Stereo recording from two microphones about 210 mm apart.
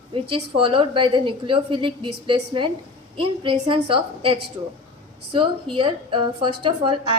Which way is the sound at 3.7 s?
25° right (ahead or behind).